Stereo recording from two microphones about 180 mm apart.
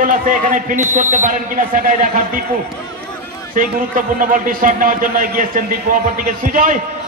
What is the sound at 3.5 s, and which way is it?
A man's voice, 50° right (ahead or behind).